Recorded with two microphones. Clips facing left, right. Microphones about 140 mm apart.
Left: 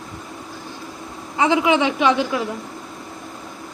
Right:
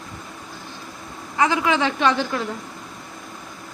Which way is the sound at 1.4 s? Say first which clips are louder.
Left 3 dB; 20° left (ahead or behind).